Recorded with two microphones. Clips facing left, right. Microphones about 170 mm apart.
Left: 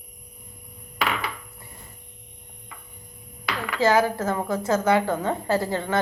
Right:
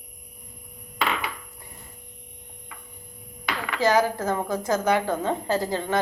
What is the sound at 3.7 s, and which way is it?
A woman's voice, 15° right (ahead or behind).